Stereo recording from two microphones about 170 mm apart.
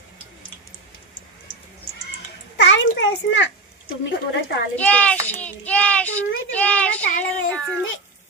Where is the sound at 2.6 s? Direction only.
90° left.